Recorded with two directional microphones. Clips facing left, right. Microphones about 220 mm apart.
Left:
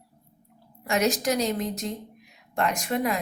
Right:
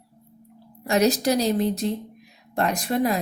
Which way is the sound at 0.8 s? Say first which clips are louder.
Right 4 dB; 35° right (ahead or behind).